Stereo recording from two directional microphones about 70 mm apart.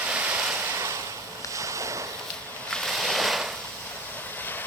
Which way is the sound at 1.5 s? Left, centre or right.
Right.